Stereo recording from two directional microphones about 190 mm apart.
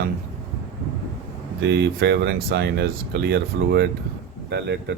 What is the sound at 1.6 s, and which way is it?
Speech, 65° right (ahead or behind).